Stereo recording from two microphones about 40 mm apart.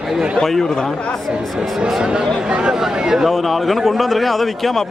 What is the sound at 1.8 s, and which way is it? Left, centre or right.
Speech, centre.